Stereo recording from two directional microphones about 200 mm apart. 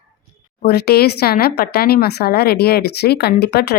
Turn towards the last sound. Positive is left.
turn(degrees=55)  # may be behind; listen again after turning